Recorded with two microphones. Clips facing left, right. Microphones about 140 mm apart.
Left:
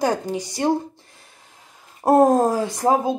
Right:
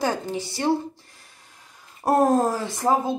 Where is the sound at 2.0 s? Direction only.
20° left (ahead or behind).